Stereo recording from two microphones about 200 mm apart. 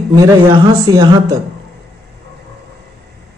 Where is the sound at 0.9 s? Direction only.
20° right (ahead or behind).